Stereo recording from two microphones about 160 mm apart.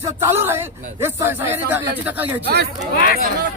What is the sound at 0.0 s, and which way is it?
Speech, 15° right (ahead or behind).